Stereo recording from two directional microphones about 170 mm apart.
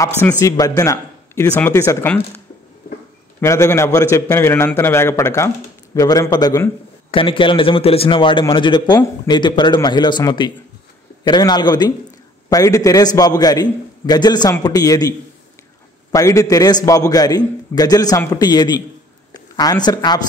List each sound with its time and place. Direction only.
0.2 s a man's voice: 20° left (ahead or behind)
7.1 s a man's voice: 30° left (ahead or behind)